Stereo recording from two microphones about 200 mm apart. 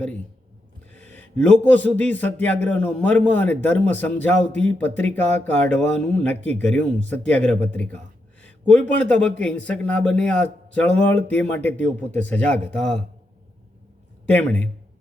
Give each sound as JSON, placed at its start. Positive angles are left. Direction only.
{"t": 0.9, "sound": "a sound", "side_deg": 5}
{"t": 2.0, "sound": "a man's voice", "side_deg": 10}
{"t": 14.3, "sound": "a man's voice", "side_deg": 5}